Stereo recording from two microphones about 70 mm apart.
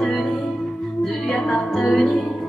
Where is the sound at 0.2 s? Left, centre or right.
Centre.